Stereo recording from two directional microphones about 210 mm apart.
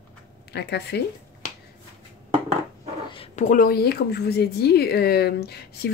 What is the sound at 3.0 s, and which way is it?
A woman's voice, 25° left (ahead or behind).